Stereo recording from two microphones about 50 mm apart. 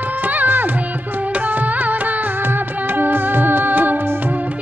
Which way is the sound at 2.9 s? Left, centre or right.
Right.